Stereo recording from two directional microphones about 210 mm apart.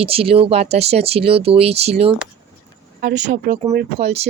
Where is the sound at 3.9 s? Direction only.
30° right (ahead or behind).